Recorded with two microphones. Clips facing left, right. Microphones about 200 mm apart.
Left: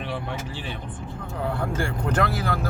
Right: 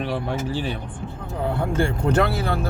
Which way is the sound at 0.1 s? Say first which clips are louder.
Right 6 dB; 40° right (ahead or behind).